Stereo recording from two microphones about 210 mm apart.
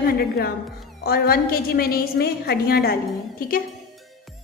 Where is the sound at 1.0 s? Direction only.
45° left (ahead or behind).